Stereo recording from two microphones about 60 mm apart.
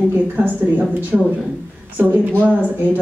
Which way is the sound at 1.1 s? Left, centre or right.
Centre.